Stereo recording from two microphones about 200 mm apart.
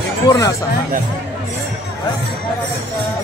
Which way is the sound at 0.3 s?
15° left (ahead or behind).